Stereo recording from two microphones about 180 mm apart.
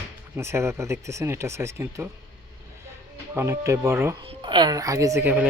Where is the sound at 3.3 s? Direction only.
15° right (ahead or behind).